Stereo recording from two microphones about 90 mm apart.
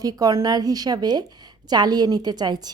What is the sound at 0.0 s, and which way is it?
Speech, 45° right (ahead or behind).